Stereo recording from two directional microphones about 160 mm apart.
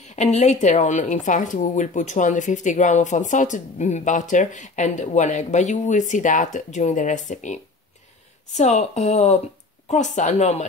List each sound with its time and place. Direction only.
0.0 s speech: 45° left (ahead or behind)